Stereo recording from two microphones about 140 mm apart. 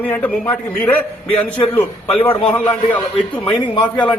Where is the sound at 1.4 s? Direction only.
10° left (ahead or behind).